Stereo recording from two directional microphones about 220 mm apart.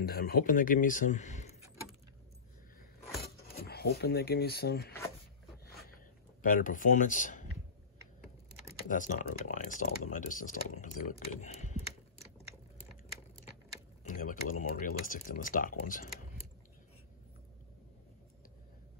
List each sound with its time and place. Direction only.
0.0 s speech: 40° left (ahead or behind)
3.2 s speech: 45° left (ahead or behind)
6.4 s speech: 40° left (ahead or behind)
8.8 s speech: 35° left (ahead or behind)
14.0 s speech: 40° left (ahead or behind)